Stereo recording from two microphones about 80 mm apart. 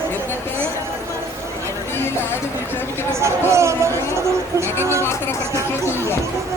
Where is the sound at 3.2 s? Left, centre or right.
Right.